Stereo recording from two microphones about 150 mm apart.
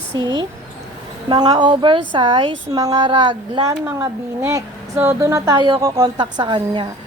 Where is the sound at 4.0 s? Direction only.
20° right (ahead or behind).